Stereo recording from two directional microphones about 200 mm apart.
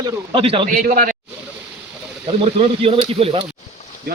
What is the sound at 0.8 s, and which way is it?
Speech, 45° right (ahead or behind).